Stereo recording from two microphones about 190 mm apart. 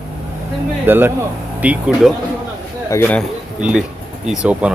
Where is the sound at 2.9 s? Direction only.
10° left (ahead or behind).